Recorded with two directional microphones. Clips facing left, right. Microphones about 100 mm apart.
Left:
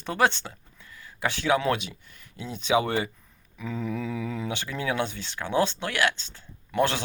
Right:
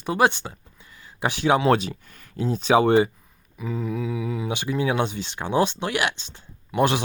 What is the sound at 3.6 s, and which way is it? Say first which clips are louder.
Mantra: right 3 dB; 5° right (ahead or behind).